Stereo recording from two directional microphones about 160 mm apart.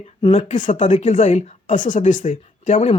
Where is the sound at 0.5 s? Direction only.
55° left (ahead or behind).